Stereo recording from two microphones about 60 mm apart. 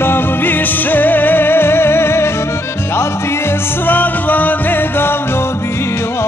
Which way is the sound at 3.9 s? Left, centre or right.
Left.